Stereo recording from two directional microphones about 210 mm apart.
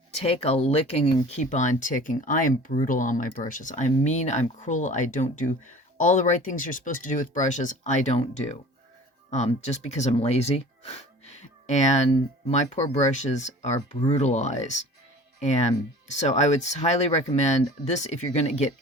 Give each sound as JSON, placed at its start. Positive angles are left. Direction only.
{"t": 0.2, "sound": "speech", "side_deg": 30}
{"t": 9.3, "sound": "speech", "side_deg": 30}